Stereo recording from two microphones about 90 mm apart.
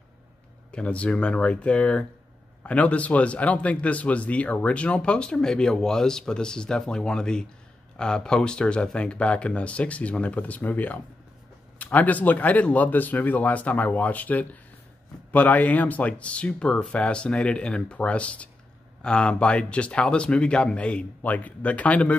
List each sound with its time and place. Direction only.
0.7 s a man's voice: 15° left (ahead or behind)